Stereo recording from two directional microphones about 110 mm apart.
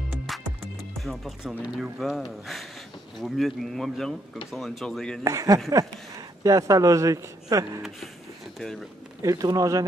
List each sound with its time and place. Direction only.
0.3 s music: centre (ahead or behind)
1.0 s speech: centre (ahead or behind)
5.2 s speech: 30° right (ahead or behind)
8.5 s speech: centre (ahead or behind)
9.2 s speech: 30° right (ahead or behind)